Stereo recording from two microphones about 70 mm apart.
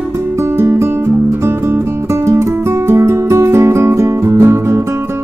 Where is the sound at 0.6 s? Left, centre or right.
Right.